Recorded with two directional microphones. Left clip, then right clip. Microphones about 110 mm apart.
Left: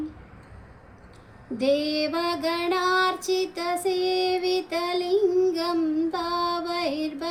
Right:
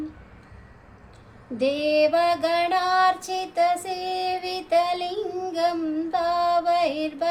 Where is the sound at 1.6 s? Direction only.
35° right (ahead or behind).